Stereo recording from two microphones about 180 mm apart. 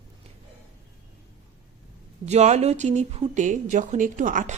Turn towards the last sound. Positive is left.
turn(degrees=-45)  # may be behind; listen again after turning